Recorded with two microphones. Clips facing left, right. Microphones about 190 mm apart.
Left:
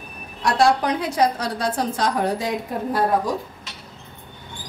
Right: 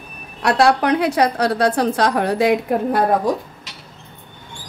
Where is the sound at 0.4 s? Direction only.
65° right (ahead or behind).